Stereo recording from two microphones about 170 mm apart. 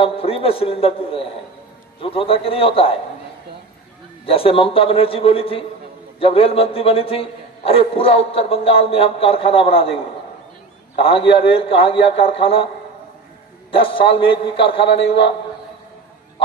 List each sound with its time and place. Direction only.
0.0 s a man's voice: 35° left (ahead or behind)
4.3 s a man's voice: 35° left (ahead or behind)
13.7 s a man's voice: 30° left (ahead or behind)